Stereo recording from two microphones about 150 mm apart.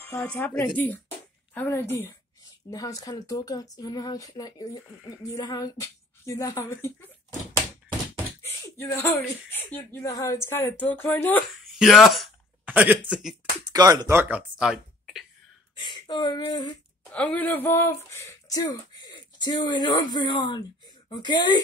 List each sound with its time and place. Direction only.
0.0 s speech: 15° left (ahead or behind)
8.4 s speech: 15° left (ahead or behind)
11.8 s speech: centre (ahead or behind)
12.6 s speech: 10° right (ahead or behind)
13.7 s speech: 25° right (ahead or behind)
14.3 s speech: 5° right (ahead or behind)
15.8 s speech: 30° left (ahead or behind)
17.1 s speech: 10° left (ahead or behind); by 21.5 s 30° left (ahead or behind)